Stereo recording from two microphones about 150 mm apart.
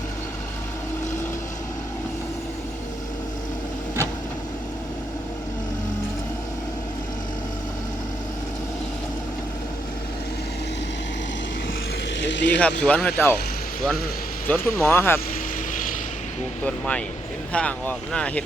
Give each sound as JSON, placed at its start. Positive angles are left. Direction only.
{"t": 12.5, "sound": "speech", "side_deg": 10}
{"t": 14.4, "sound": "speech", "side_deg": 10}
{"t": 16.6, "sound": "speech", "side_deg": 10}